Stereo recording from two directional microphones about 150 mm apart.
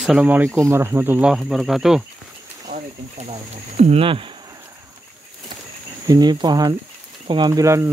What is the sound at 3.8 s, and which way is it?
Speech, 40° right (ahead or behind).